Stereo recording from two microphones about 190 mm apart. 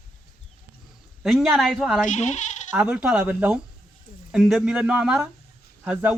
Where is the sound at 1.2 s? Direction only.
Centre (ahead or behind).